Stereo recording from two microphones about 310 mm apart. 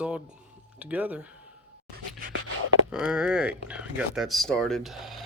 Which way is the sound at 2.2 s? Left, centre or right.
Right.